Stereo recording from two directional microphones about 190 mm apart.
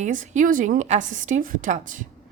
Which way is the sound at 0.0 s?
40° right (ahead or behind).